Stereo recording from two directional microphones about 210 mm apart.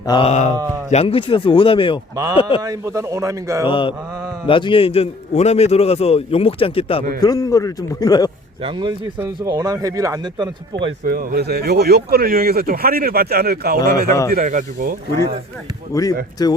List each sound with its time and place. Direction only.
0.0 s a man's voice: 25° left (ahead or behind)
2.6 s speech: 15° right (ahead or behind)
3.7 s a man's voice: 25° left (ahead or behind)
8.6 s speech: 20° right (ahead or behind)
11.0 s speech: 45° right (ahead or behind)
15.9 s a man's voice: 15° left (ahead or behind)